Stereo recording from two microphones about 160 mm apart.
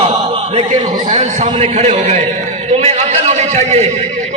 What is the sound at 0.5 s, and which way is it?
A man's voice, 45° right (ahead or behind).